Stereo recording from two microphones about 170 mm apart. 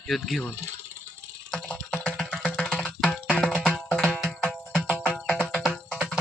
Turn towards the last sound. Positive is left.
turn(degrees=5)  # may be behind; listen again after turning